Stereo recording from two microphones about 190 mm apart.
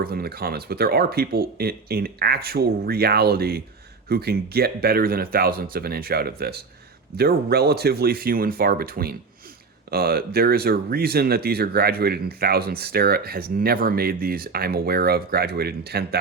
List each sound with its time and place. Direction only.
0.0 s speech: 55° right (ahead or behind)